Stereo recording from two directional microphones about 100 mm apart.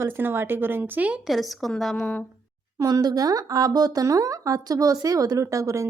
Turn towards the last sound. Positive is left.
turn(degrees=-30)  # may be behind; listen again after turning